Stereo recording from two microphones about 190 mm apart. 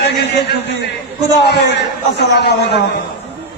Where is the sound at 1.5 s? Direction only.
60° left (ahead or behind).